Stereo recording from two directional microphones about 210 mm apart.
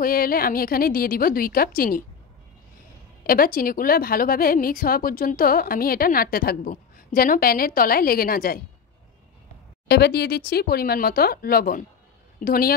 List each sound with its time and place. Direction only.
0.0 s speech: 45° left (ahead or behind)
3.3 s speech: 45° left (ahead or behind)
9.8 s speech: 50° left (ahead or behind)